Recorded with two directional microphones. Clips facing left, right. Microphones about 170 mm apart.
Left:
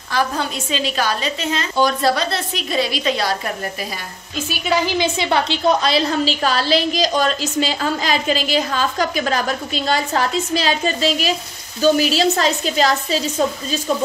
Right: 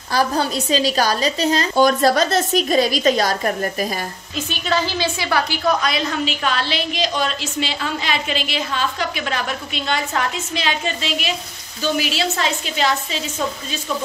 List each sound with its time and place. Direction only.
0.1 s a woman's voice: 35° right (ahead or behind)
4.5 s a woman's voice: 10° left (ahead or behind); by 13.2 s 40° left (ahead or behind)